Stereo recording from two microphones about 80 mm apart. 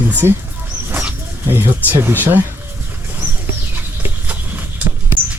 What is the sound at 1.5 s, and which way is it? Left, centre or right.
Speech, right.